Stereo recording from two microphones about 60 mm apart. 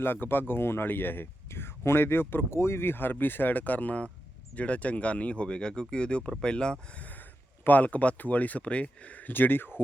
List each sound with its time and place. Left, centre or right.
0.0 s speech: left; by 7.0 s centre
7.0 s speech: left